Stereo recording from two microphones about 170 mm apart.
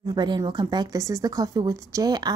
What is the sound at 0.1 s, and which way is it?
Speech, 25° right (ahead or behind).